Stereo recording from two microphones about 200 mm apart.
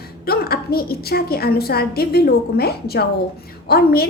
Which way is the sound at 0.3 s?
50° left (ahead or behind).